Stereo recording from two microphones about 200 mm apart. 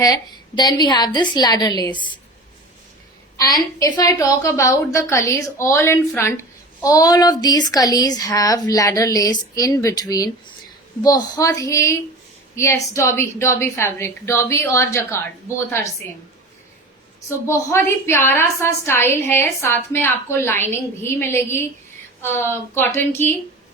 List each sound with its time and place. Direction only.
0.0 s a woman's voice: 20° left (ahead or behind)
3.3 s a woman's voice: 20° left (ahead or behind)
17.2 s a woman's voice: 15° left (ahead or behind)